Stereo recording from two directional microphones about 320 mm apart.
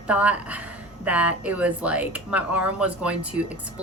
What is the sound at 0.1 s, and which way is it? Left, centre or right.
A woman's voice, centre.